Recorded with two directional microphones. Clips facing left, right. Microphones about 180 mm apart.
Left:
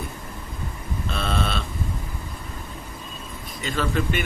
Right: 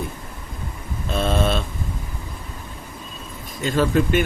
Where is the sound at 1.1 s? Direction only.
45° right (ahead or behind).